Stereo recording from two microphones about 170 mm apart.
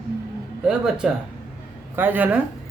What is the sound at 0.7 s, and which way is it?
Speech, 5° right (ahead or behind).